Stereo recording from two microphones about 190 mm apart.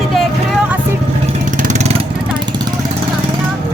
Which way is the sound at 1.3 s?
40° right (ahead or behind).